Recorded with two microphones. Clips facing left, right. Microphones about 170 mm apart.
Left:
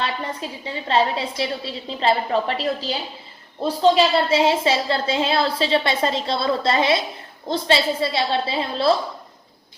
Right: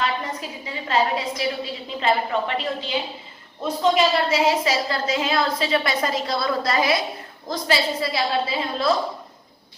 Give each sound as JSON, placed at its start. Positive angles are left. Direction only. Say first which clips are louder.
{"t": 0.0, "sound": "a woman's voice", "louder": "even", "side_deg": 30}